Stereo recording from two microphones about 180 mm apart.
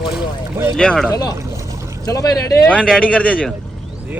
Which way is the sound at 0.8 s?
5° left (ahead or behind).